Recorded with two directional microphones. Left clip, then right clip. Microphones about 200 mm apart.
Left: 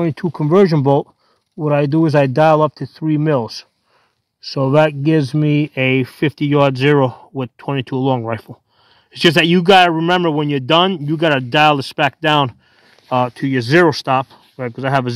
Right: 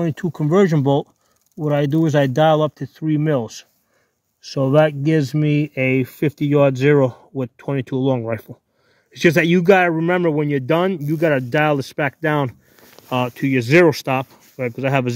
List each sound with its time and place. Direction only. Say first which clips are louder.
0.0 s speech: left 3 dB; 20° left (ahead or behind)
13.1 s speech: left 3 dB; 10° left (ahead or behind)